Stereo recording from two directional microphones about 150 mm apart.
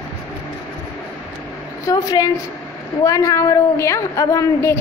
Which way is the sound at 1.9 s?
25° left (ahead or behind).